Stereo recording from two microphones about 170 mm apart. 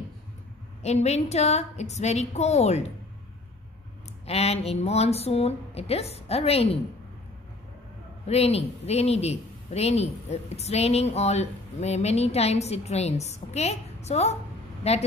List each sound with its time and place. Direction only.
0.8 s a man's voice: 40° left (ahead or behind)
4.3 s a man's voice: 35° left (ahead or behind)
8.3 s a man's voice: 35° left (ahead or behind)